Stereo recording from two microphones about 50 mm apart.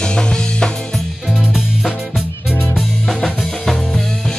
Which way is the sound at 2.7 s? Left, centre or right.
Centre.